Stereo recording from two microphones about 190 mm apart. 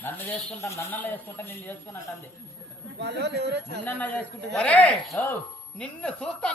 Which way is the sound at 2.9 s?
60° right (ahead or behind).